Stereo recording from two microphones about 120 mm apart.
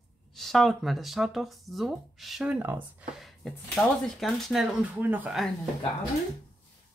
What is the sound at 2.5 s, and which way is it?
Speech, 10° right (ahead or behind).